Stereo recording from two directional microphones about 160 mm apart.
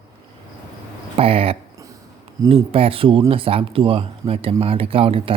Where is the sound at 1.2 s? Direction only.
35° right (ahead or behind).